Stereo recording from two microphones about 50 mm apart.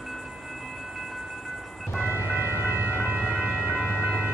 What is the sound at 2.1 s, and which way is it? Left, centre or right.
Vehicle, right.